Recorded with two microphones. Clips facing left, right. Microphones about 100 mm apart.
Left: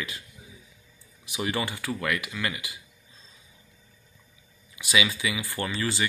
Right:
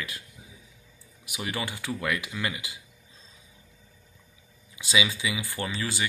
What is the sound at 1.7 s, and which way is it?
Speech, 15° right (ahead or behind).